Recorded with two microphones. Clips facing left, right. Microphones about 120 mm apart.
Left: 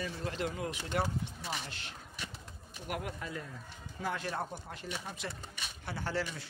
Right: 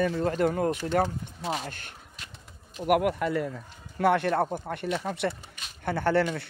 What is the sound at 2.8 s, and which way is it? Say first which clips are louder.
Speech: right 16 dB; 70° right (ahead or behind).